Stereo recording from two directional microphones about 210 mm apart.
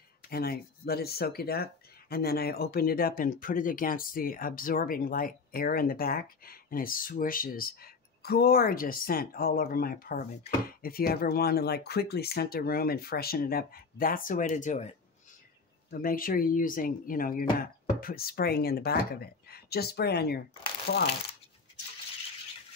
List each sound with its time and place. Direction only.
0.3 s speech: 45° left (ahead or behind)